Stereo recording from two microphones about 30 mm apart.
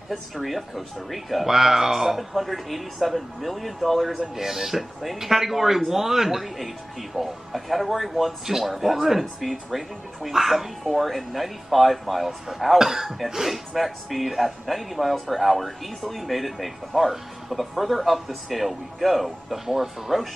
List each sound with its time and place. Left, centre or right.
0.1 s speech: centre
1.5 s speech: centre
4.4 s speech: centre
6.4 s speech: centre
12.7 s speech: centre